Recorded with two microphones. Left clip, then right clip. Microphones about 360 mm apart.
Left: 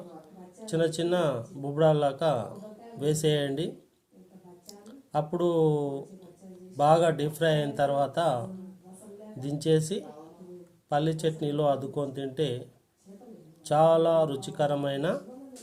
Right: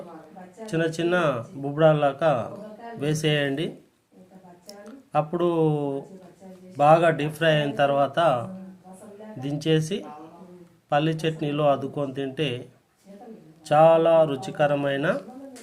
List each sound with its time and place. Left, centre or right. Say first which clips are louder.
0.7 s speech: right 3 dB; left
4.8 s speech: right 5 dB; left
13.7 s speech: right 5 dB; left